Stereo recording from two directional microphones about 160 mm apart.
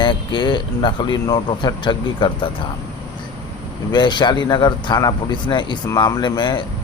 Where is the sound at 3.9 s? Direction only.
30° left (ahead or behind).